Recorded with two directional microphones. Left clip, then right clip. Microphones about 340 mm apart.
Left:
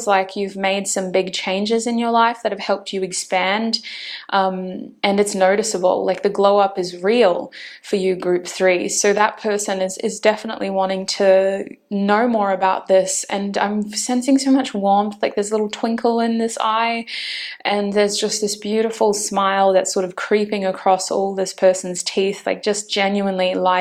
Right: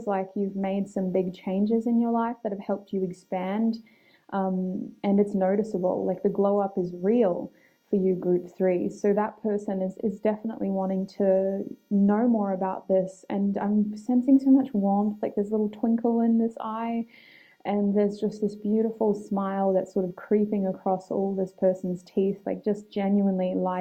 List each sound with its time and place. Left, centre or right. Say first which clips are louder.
0.0 s speech: left 11 dB; centre
5.8 s speech: left 12 dB; left
6.1 s speech: left 9 dB; centre
14.8 s speech: left 10 dB; centre
15.2 s speech: left 8 dB; centre